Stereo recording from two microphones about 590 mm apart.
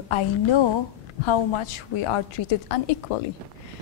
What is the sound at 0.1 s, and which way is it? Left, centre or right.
A woman's voice, left.